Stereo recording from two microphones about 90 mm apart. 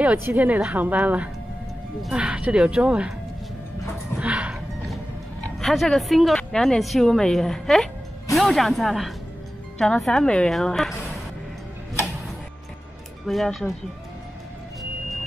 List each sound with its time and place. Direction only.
0.0 s speech: 20° right (ahead or behind)
4.2 s music: 15° right (ahead or behind)
5.6 s speech: 5° left (ahead or behind)
13.3 s speech: centre (ahead or behind)